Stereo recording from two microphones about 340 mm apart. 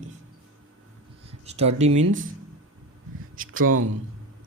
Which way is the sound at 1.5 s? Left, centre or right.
Centre.